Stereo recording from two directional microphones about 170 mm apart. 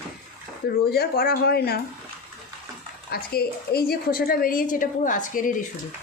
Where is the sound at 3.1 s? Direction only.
65° left (ahead or behind).